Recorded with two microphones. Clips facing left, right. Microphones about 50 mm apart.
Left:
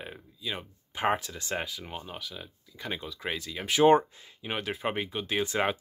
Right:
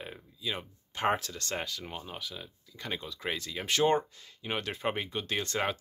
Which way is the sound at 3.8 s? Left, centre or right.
Centre.